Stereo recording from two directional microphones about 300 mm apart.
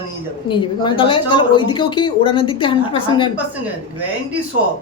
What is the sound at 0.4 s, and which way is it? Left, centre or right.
Speech, centre.